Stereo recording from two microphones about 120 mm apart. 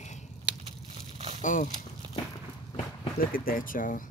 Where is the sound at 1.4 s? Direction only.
90° left.